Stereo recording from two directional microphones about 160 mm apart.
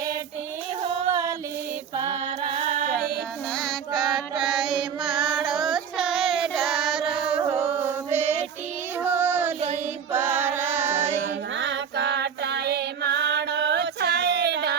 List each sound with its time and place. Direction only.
1.1 s music: 20° right (ahead or behind)
2.4 s music: 45° right (ahead or behind)
3.5 s mantra: centre (ahead or behind)
7.5 s chant: 10° right (ahead or behind)
9.0 s child singing: 10° right (ahead or behind)
10.1 s music: 10° right (ahead or behind)
11.7 s female singing: 90° right